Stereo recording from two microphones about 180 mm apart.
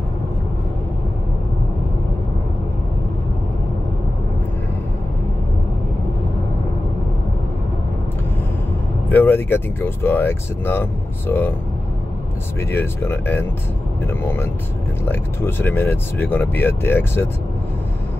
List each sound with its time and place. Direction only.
9.1 s speech: 10° left (ahead or behind)
12.7 s speech: 10° left (ahead or behind)